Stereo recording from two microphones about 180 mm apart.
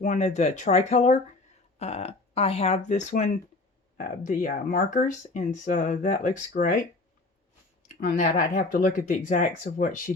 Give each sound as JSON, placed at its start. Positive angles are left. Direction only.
{"t": 0.0, "sound": "speech", "side_deg": 40}
{"t": 7.9, "sound": "speech", "side_deg": 45}